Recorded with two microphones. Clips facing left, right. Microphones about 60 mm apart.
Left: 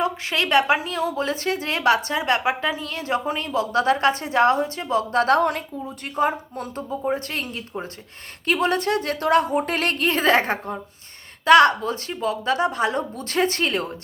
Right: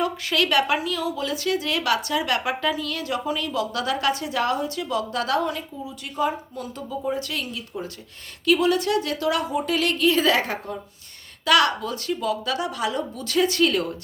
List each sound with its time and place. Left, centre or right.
0.0 s a woman's voice: left